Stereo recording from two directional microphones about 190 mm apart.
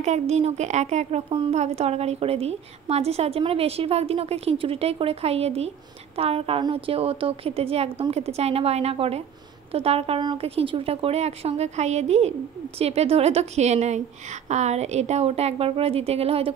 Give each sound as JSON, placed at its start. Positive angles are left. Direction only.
{"t": 0.0, "sound": "speech", "side_deg": -35}